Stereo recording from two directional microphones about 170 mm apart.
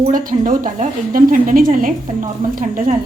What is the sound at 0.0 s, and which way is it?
Speech, 50° right (ahead or behind).